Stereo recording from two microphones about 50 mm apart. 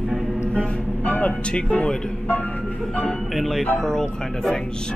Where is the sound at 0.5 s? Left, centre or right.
Left.